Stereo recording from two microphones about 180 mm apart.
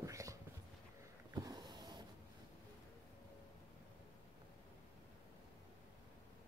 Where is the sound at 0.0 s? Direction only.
15° right (ahead or behind).